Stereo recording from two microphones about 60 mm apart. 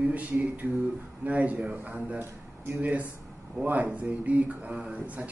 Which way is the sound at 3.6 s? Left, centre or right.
Right.